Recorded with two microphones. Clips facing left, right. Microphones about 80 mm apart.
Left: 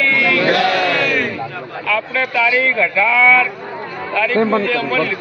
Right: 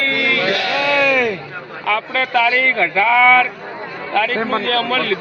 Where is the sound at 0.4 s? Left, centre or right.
Left.